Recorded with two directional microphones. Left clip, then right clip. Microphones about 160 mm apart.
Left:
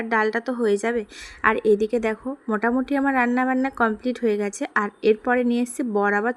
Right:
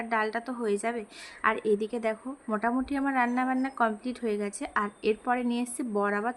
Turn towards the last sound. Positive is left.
turn(degrees=30)  # may be behind; listen again after turning